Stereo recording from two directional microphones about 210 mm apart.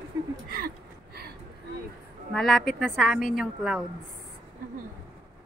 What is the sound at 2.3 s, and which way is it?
A woman's voice, centre (ahead or behind).